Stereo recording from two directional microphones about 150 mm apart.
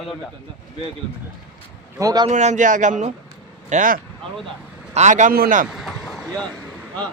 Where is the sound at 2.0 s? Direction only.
25° right (ahead or behind).